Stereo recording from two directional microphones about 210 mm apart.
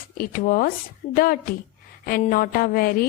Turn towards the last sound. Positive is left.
turn(degrees=45)  # may be behind; listen again after turning